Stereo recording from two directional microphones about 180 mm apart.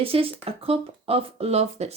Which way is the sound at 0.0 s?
30° right (ahead or behind).